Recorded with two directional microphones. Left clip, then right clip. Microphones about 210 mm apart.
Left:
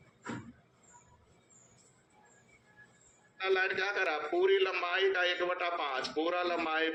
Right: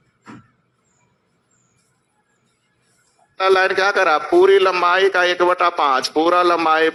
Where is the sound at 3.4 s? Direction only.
50° right (ahead or behind).